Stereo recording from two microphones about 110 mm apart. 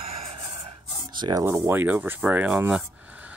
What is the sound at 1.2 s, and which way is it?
Speech, 50° right (ahead or behind).